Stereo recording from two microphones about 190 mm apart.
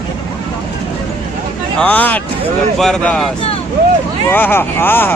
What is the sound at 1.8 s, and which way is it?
A man's voice, 10° left (ahead or behind).